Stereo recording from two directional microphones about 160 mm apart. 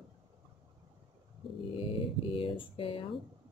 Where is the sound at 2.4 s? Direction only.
35° left (ahead or behind).